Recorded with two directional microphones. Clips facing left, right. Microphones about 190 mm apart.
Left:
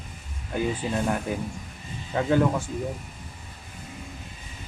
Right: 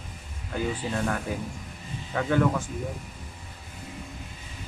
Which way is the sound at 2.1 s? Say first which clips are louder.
Left 3 dB; 25° left (ahead or behind).